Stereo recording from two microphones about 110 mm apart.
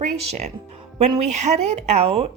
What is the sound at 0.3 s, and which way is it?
A woman's voice, 90° right.